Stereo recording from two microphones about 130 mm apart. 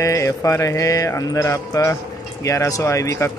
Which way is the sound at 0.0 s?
25° left (ahead or behind).